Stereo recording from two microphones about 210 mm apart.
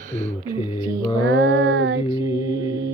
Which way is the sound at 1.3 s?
60° right (ahead or behind).